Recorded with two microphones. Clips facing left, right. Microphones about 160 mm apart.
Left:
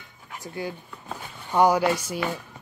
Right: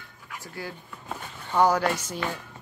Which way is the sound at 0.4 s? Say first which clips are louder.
Left 5 dB; 20° left (ahead or behind).